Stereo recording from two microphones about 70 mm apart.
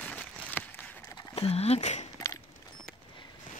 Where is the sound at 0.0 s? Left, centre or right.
Left.